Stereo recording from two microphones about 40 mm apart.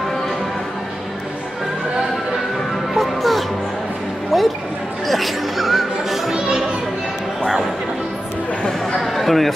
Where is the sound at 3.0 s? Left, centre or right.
Centre.